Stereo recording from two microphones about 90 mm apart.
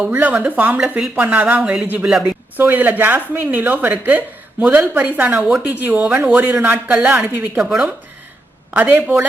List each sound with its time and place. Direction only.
0.0 s speech: 15° right (ahead or behind)
8.7 s speech: 20° right (ahead or behind)